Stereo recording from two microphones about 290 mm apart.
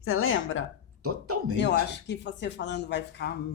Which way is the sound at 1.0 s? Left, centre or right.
Right.